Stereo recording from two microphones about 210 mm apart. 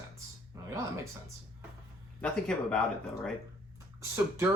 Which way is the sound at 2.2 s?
5° left (ahead or behind).